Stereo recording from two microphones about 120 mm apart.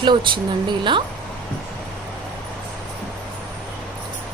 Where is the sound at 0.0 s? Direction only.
40° right (ahead or behind).